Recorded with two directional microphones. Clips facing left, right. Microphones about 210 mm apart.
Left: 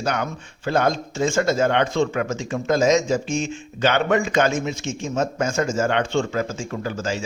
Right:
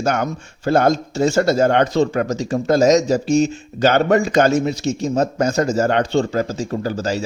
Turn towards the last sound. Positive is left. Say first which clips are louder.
# right 5 dB
turn(degrees=-35)  # may be behind; listen again after turning